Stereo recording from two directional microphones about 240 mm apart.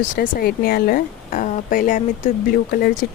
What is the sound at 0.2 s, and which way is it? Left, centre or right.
Speech, left.